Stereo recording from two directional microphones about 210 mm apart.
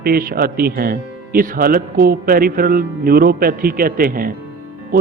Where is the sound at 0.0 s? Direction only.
45° right (ahead or behind).